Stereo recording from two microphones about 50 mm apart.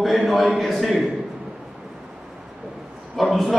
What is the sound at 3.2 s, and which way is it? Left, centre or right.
Speech, centre.